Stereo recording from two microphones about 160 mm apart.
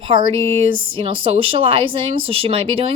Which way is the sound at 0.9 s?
35° right (ahead or behind).